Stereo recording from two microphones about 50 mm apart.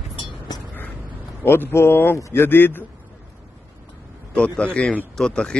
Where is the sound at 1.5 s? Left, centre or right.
Left.